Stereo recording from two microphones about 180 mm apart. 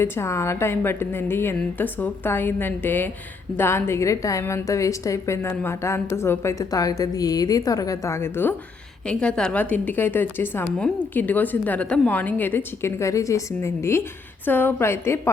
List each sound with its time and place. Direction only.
0.0 s a woman's voice: 15° left (ahead or behind)